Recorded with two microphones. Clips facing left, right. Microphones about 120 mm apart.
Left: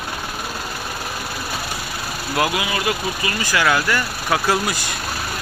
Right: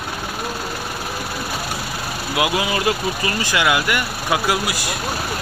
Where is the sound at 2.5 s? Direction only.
30° right (ahead or behind).